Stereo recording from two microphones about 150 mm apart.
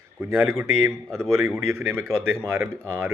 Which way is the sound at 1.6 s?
15° right (ahead or behind).